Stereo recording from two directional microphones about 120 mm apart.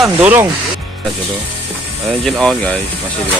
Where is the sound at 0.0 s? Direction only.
20° right (ahead or behind).